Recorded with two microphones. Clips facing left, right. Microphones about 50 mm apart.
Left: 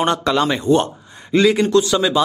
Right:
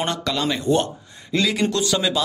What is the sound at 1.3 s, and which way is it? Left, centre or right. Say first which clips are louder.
Speech: left 7 dB; left.